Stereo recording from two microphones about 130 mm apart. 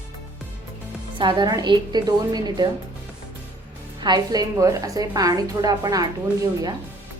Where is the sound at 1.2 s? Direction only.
35° right (ahead or behind).